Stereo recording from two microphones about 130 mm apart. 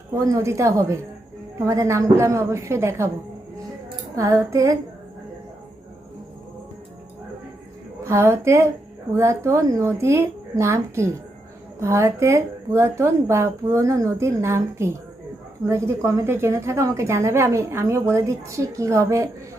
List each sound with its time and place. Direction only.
0.1 s a woman's voice: 25° right (ahead or behind)
4.1 s a woman's voice: 25° right (ahead or behind)
8.0 s a woman's voice: 20° right (ahead or behind)